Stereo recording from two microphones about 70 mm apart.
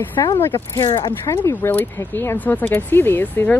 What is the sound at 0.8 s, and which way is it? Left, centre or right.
Speech, left.